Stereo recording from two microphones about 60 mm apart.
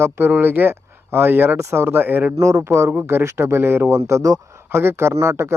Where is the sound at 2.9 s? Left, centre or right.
Right.